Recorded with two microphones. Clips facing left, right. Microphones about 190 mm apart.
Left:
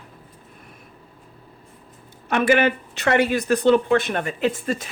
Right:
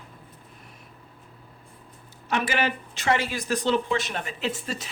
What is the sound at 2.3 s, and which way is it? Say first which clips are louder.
Speech: left 8 dB; 55° left (ahead or behind).